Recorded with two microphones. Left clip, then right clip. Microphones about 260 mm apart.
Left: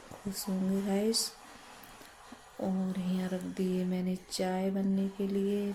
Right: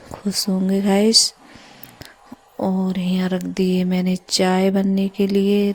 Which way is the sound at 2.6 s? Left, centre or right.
Right.